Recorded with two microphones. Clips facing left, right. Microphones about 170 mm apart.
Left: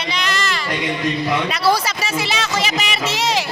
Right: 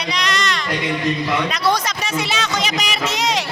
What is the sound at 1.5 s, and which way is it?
Speech, 5° left (ahead or behind).